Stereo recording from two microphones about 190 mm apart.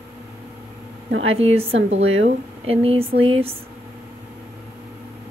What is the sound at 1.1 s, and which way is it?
Speech, 90° right.